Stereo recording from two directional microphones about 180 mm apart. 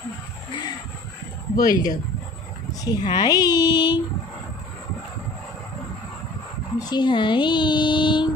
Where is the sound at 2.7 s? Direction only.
20° left (ahead or behind).